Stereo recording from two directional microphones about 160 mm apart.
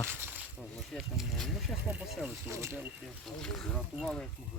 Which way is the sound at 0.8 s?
Centre (ahead or behind).